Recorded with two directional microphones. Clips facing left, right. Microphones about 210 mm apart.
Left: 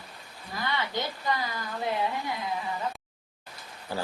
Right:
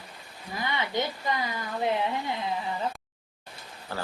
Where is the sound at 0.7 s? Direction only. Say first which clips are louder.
Right 2 dB; 20° right (ahead or behind).